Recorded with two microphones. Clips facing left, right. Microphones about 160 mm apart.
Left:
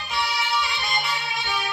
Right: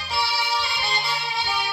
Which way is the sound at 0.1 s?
30° right (ahead or behind).